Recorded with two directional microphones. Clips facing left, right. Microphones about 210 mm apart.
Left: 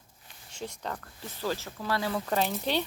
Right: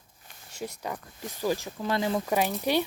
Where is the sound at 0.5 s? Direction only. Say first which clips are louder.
Right 2 dB; 10° right (ahead or behind).